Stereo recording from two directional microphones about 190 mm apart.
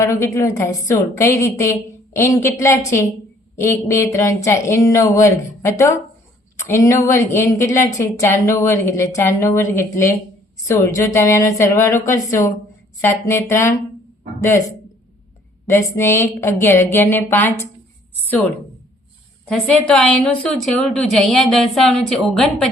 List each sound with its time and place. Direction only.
0.0 s a woman's voice: 15° left (ahead or behind)
15.6 s a woman's voice: 15° left (ahead or behind)
19.5 s a woman's voice: 5° left (ahead or behind)